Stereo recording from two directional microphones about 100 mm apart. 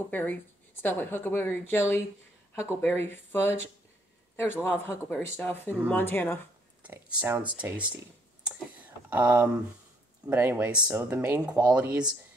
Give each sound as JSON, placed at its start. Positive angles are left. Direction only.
{"t": 0.1, "sound": "speech", "side_deg": 15}
{"t": 6.8, "sound": "speech", "side_deg": -15}
{"t": 8.5, "sound": "computer keyboard", "side_deg": -15}
{"t": 10.2, "sound": "speech", "side_deg": -20}